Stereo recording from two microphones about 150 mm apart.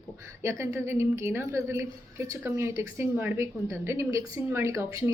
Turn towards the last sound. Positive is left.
turn(degrees=-20)  # may be behind; listen again after turning